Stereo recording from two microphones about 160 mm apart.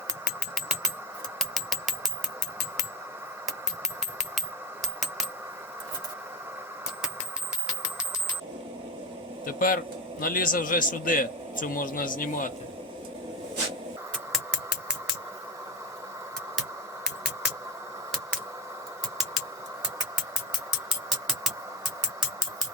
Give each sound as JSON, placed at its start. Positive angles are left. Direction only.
{"t": 1.4, "sound": "engine", "side_deg": 0}
{"t": 4.8, "sound": "coin", "side_deg": 0}
{"t": 9.5, "sound": "a man's voice", "side_deg": 65}
{"t": 14.3, "sound": "music", "side_deg": 0}
{"t": 16.6, "sound": "music", "side_deg": 0}